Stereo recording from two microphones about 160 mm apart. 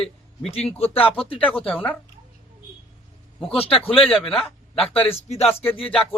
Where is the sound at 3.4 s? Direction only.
35° left (ahead or behind).